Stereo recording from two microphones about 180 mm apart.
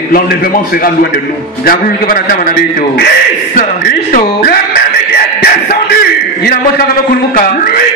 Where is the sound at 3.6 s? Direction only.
50° left (ahead or behind).